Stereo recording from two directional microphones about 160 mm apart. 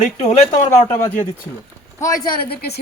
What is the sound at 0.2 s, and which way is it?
Speech, 45° left (ahead or behind).